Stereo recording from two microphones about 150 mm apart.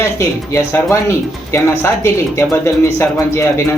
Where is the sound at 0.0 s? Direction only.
20° left (ahead or behind).